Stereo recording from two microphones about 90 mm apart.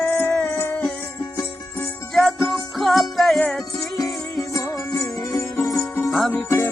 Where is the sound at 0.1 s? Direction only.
20° left (ahead or behind).